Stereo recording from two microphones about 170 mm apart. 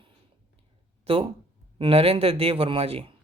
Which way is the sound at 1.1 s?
35° right (ahead or behind).